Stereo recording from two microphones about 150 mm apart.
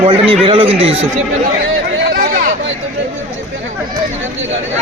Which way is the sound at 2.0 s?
85° right.